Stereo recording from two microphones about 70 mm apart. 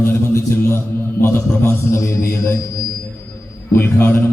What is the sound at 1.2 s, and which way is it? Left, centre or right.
Speech, left.